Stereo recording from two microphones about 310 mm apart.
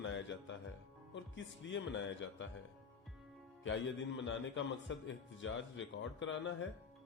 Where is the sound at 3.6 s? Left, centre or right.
Left.